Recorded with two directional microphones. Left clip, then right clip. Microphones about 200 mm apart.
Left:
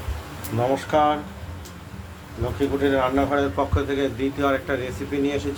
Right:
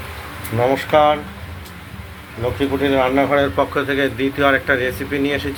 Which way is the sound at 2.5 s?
20° right (ahead or behind).